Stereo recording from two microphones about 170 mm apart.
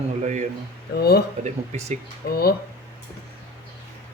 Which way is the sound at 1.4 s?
40° right (ahead or behind).